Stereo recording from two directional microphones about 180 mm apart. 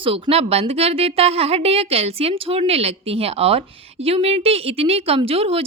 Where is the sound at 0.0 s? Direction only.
30° right (ahead or behind).